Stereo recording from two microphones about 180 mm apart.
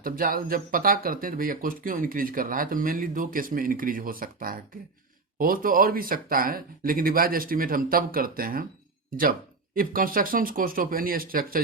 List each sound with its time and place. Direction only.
0.0 s speech: 50° right (ahead or behind)